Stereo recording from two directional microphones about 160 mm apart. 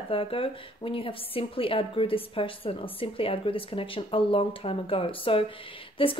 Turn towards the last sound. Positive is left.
turn(degrees=35)  # may be behind; listen again after turning